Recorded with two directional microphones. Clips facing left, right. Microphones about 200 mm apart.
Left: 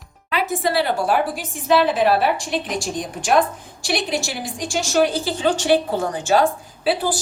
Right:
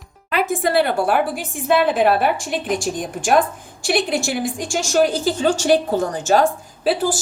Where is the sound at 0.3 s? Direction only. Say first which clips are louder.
Right 2 dB; 50° right (ahead or behind).